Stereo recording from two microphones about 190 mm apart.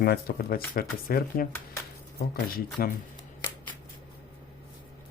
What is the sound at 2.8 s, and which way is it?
Speech, 50° left (ahead or behind).